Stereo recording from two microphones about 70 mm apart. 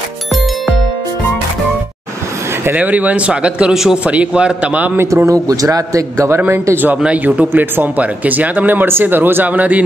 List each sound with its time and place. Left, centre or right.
2.6 s speech: right
3.7 s a man's voice: centre
4.0 s a man's voice: centre
5.1 s a man's voice: right
6.5 s speech: right
7.0 s speech: centre